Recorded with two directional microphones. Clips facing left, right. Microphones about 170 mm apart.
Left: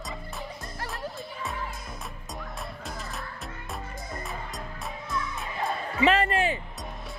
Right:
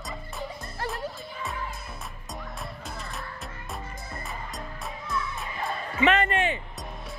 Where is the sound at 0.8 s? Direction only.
Centre (ahead or behind).